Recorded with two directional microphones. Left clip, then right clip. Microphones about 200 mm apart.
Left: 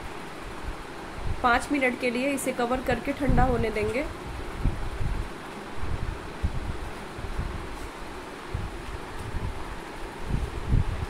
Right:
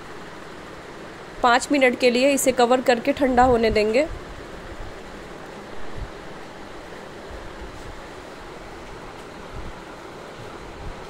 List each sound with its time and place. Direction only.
1.4 s speech: 50° right (ahead or behind)